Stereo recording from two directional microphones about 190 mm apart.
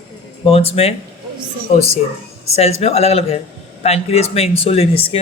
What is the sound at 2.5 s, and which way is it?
Speech, 35° left (ahead or behind).